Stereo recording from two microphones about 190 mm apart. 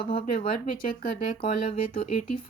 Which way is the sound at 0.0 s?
45° left (ahead or behind).